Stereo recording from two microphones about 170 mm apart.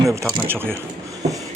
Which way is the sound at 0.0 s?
15° right (ahead or behind).